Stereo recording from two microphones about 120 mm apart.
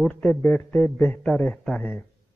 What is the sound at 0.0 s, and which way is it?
A man's voice, 10° left (ahead or behind).